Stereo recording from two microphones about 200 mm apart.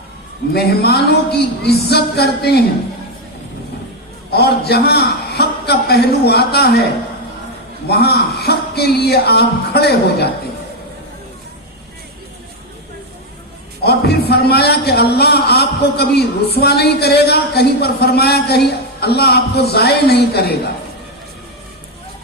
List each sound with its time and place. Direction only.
0.5 s a man's voice: 50° left (ahead or behind)
4.3 s a man's voice: 55° left (ahead or behind)
7.9 s a man's voice: 55° left (ahead or behind)
13.8 s a man's voice: 55° left (ahead or behind)